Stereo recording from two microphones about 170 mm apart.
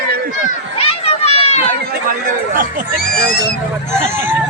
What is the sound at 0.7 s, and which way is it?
Run, 35° left (ahead or behind).